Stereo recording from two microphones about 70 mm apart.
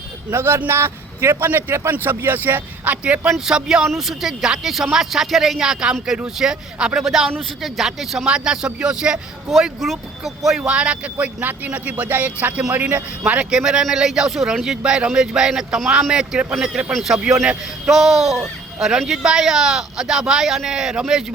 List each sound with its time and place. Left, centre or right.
0.3 s speech: right; by 3.8 s centre
3.8 s a sound: centre
4.2 s speech: centre
10.6 s speech: centre
17.8 s a sound: centre
18.8 s speech: centre